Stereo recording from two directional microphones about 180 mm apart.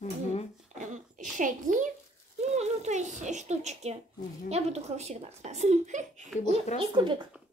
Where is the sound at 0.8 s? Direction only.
45° right (ahead or behind).